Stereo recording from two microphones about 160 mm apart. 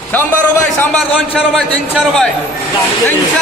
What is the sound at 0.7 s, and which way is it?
Speech, 5° left (ahead or behind).